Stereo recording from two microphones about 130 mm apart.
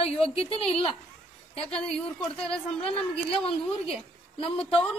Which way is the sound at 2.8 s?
50° left (ahead or behind).